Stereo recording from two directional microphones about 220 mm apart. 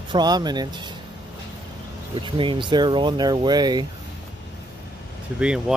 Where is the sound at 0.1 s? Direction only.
20° right (ahead or behind).